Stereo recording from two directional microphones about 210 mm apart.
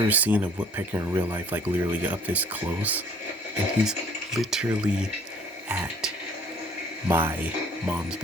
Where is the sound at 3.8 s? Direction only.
Centre (ahead or behind).